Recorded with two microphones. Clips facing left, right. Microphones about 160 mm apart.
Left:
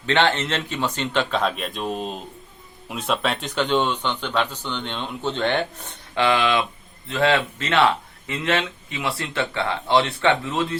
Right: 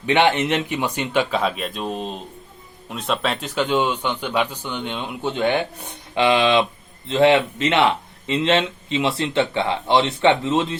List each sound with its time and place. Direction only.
0.0 s speech: 15° right (ahead or behind)